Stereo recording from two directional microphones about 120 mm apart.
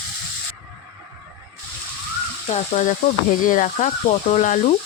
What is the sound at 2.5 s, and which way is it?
Stir, 75° left (ahead or behind).